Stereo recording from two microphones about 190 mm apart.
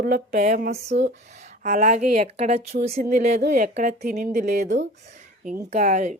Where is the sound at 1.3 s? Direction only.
35° right (ahead or behind).